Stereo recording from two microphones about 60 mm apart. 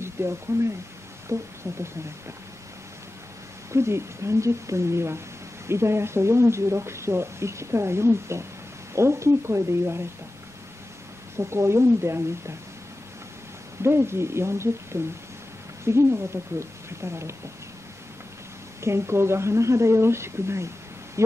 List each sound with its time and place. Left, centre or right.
0.0 s speech: right
3.7 s speech: right
11.3 s speech: right
13.8 s speech: right
18.8 s speech: right